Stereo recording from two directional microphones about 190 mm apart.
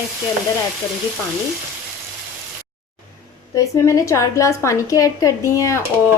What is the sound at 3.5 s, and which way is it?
A woman's voice, 15° left (ahead or behind).